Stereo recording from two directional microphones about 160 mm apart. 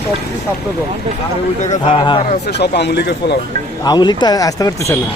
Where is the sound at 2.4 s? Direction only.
90° left.